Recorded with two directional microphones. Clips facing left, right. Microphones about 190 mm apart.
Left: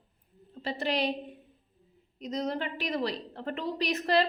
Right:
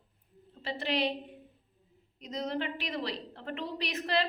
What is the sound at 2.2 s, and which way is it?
A woman's voice, 40° left (ahead or behind).